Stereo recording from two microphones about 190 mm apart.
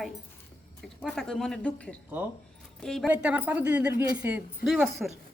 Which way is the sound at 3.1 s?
10° right (ahead or behind).